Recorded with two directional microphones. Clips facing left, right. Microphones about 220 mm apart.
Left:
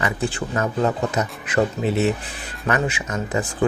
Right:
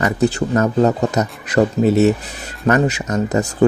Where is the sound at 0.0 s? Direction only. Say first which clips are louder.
Right 7 dB; 40° right (ahead or behind).